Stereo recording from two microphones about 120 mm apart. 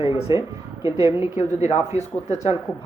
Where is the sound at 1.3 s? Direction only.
75° left (ahead or behind).